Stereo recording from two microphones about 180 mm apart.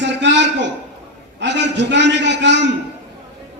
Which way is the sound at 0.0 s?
80° right.